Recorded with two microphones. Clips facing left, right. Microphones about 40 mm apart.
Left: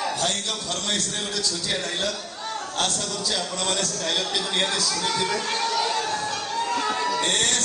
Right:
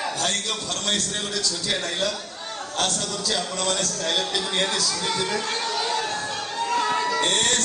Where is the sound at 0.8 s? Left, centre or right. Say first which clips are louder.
Right 3 dB; right.